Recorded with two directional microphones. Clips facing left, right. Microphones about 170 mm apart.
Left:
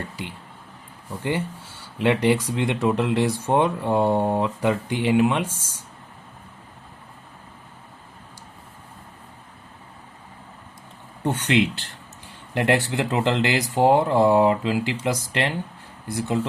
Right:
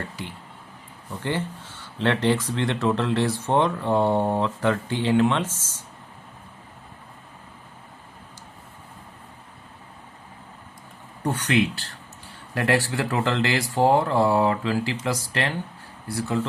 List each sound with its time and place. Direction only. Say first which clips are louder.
1.2 s speech: left 2 dB; 10° left (ahead or behind)
11.2 s speech: left 1 dB; 20° left (ahead or behind)